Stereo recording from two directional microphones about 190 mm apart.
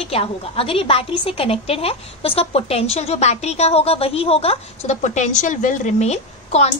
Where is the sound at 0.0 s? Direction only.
30° left (ahead or behind).